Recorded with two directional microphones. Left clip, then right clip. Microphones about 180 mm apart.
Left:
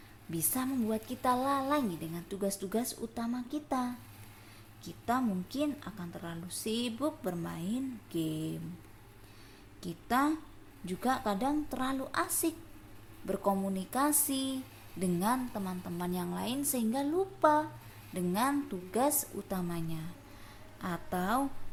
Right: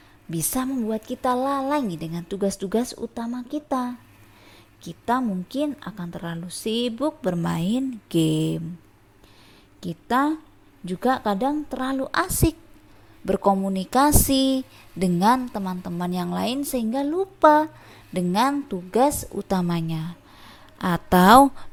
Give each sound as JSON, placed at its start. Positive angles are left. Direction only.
{"t": 0.3, "sound": "speech", "side_deg": -40}
{"t": 9.8, "sound": "a woman's voice", "side_deg": -40}